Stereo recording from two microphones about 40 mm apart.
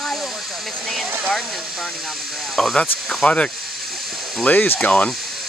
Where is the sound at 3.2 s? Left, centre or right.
Left.